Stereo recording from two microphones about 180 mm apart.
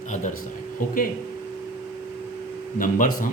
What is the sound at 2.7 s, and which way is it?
Speech, 50° left (ahead or behind).